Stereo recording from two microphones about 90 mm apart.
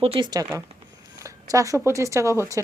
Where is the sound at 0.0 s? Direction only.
90° right.